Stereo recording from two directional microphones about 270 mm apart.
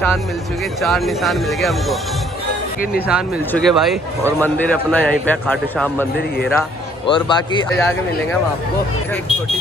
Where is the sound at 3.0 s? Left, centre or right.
Centre.